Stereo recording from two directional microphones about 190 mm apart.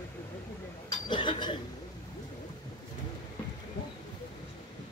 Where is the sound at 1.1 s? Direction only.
25° left (ahead or behind).